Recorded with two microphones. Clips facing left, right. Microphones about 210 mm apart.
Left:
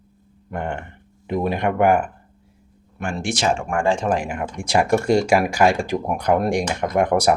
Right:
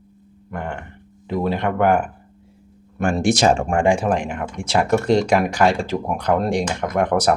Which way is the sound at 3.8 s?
10° right (ahead or behind).